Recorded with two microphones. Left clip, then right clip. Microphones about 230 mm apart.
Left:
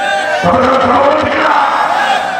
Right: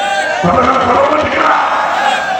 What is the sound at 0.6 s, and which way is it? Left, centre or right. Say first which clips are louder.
Chant: even; left.